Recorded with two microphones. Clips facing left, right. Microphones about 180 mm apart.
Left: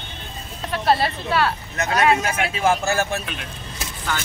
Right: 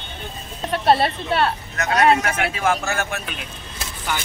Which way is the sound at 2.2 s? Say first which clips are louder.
Left 1 dB; 25° left (ahead or behind).